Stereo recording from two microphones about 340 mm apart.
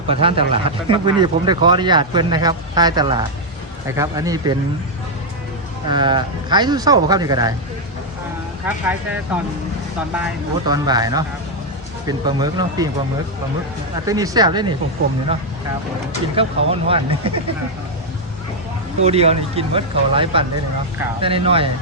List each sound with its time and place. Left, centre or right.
0.1 s speech: centre
5.9 s speech: centre
8.6 s speech: centre
10.7 s speech: centre
14.1 s speech: centre
16.3 s speech: centre
19.0 s speech: centre